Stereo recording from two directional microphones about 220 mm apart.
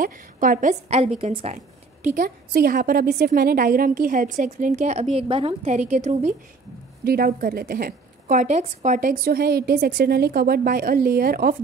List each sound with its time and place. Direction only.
0.0 s a woman's voice: 40° right (ahead or behind)
2.1 s a woman's voice: 45° right (ahead or behind)
7.1 s a woman's voice: 45° right (ahead or behind)